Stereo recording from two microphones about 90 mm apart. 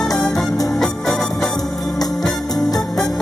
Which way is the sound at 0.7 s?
5° left (ahead or behind).